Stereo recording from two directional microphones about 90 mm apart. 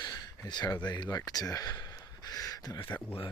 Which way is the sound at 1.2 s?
45° left (ahead or behind).